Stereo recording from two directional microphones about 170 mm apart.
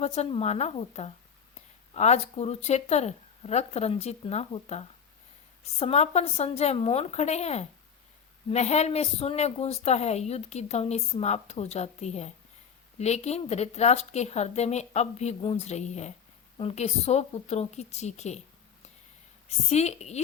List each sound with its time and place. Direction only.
0.0 s a woman's voice: 40° left (ahead or behind)
19.5 s a woman's voice: 40° left (ahead or behind)